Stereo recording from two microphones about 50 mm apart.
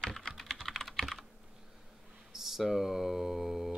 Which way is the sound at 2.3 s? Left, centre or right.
Centre.